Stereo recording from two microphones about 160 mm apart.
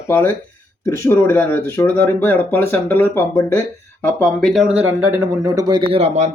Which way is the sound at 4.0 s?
5° left (ahead or behind).